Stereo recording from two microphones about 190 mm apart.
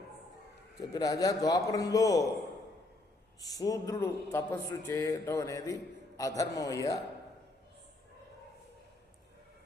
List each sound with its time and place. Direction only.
0.8 s a man's voice: 20° left (ahead or behind)
3.4 s a man's voice: 20° left (ahead or behind)